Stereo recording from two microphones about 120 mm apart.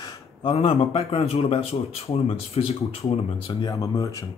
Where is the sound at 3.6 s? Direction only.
30° left (ahead or behind).